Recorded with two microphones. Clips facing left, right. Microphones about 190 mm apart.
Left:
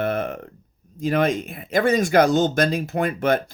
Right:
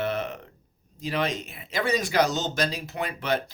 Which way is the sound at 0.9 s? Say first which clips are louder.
Left 7 dB; 50° left (ahead or behind).